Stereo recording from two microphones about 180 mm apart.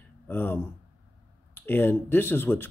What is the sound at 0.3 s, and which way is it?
Speech, 10° left (ahead or behind).